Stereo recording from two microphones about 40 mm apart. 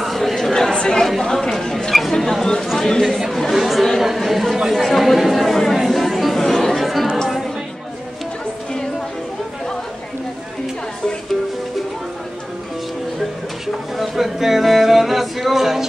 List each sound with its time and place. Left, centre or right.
0.0 s chatter: centre
2.6 s a sound: centre
2.9 s speech: centre
3.5 s chatter: centre
4.0 s speech: centre
4.8 s chatter: centre
13.9 s music: centre